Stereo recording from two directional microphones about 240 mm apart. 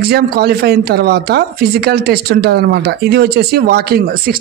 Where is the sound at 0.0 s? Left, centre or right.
Right.